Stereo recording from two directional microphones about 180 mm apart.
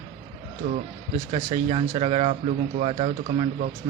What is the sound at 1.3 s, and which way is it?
Speech, 30° right (ahead or behind).